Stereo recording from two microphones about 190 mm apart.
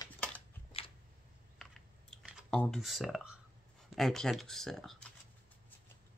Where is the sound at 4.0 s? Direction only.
Centre (ahead or behind).